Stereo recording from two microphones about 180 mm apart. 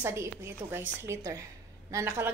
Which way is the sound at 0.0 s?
15° right (ahead or behind).